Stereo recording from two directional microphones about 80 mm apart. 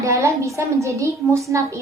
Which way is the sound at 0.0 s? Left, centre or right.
Right.